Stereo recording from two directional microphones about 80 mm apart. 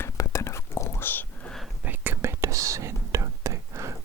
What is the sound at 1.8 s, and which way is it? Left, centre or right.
Whispering, right.